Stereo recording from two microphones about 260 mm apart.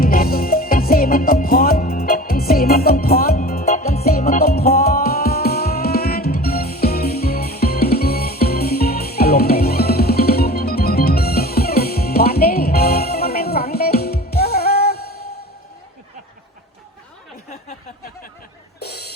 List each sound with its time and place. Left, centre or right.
0.0 s music: left